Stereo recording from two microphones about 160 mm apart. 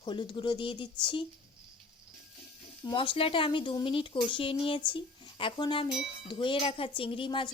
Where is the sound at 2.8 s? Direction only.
30° left (ahead or behind).